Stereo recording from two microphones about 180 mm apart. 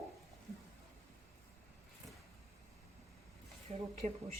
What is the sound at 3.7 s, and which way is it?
Speech, 35° right (ahead or behind).